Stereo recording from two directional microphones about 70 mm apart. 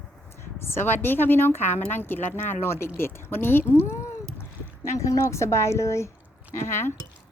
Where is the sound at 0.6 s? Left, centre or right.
Left.